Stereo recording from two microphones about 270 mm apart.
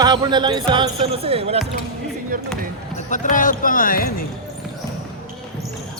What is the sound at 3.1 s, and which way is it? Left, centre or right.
Speech, left.